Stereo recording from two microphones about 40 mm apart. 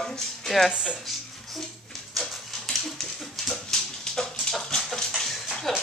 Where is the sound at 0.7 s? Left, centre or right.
Right.